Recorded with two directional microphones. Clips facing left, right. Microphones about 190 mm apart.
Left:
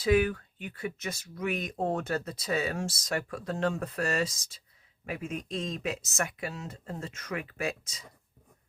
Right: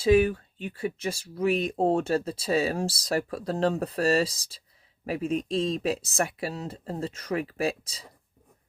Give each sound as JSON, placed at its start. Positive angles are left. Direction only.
{"t": 0.0, "sound": "speech", "side_deg": -25}